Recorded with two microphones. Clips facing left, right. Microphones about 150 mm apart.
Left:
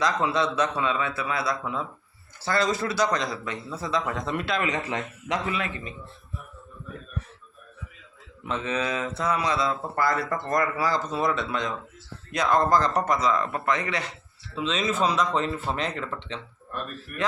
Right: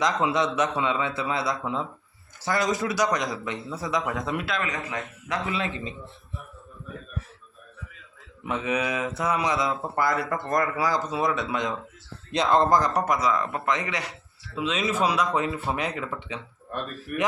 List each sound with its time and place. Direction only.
0.0 s a man's voice: 20° right (ahead or behind)
4.7 s speech: 30° left (ahead or behind)
5.5 s a man's voice: 25° right (ahead or behind)
8.4 s a man's voice: 15° right (ahead or behind)